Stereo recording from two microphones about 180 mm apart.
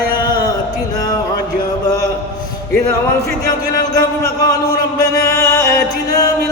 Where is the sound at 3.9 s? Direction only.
20° left (ahead or behind).